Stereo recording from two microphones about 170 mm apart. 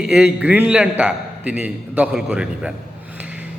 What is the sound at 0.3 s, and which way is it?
A man's voice, 10° right (ahead or behind).